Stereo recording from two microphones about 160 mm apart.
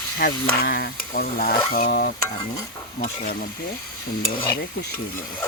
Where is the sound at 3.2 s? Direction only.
65° left (ahead or behind).